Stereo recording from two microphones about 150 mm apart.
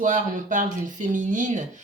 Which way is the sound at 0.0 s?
60° right (ahead or behind).